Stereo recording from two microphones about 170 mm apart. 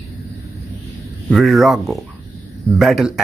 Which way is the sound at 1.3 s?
Centre (ahead or behind).